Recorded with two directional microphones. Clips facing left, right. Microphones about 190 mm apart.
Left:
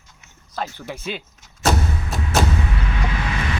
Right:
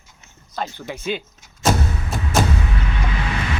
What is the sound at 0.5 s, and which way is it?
Speech, 5° left (ahead or behind).